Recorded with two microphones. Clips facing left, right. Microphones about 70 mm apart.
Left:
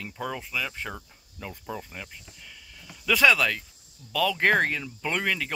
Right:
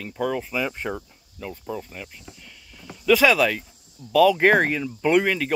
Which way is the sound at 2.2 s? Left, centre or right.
Centre.